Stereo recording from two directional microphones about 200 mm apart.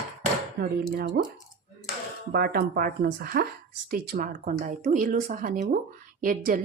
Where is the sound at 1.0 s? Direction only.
50° right (ahead or behind).